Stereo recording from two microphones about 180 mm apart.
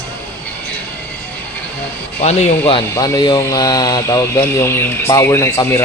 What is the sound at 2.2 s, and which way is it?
Speech, 35° left (ahead or behind).